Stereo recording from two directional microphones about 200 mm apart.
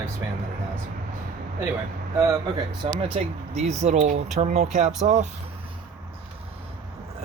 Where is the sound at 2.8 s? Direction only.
25° right (ahead or behind).